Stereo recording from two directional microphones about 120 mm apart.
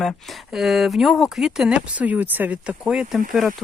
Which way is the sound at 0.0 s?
Centre (ahead or behind).